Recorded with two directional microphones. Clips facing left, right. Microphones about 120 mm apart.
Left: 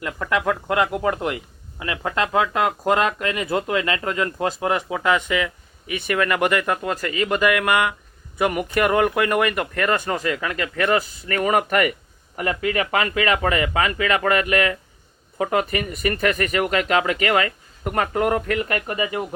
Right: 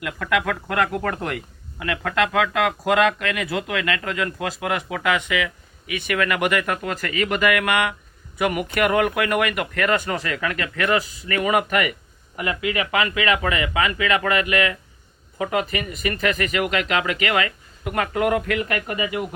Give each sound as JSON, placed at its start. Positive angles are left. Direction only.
{"t": 0.0, "sound": "speech", "side_deg": 30}
{"t": 10.2, "sound": "speech", "side_deg": 30}
{"t": 11.0, "sound": "speech", "side_deg": 45}